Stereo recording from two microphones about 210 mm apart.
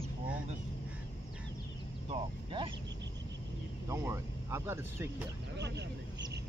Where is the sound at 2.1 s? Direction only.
25° right (ahead or behind).